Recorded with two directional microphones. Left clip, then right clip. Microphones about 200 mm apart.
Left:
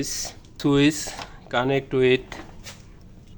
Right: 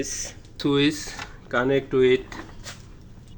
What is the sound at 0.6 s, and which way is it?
Speech, 25° left (ahead or behind).